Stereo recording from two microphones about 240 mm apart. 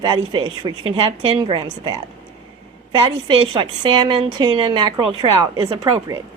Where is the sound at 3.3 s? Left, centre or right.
Right.